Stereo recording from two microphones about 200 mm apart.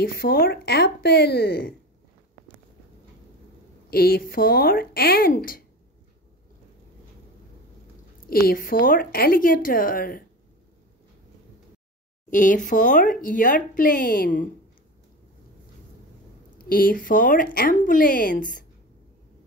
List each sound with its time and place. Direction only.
0.0 s a woman's voice: 50° left (ahead or behind)
3.9 s a woman's voice: 50° left (ahead or behind)
8.3 s a woman's voice: 50° left (ahead or behind)
12.3 s speech: 40° left (ahead or behind)
16.5 s a woman's voice: 45° left (ahead or behind)